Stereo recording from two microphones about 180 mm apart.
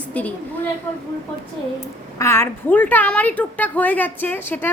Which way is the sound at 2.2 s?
15° left (ahead or behind).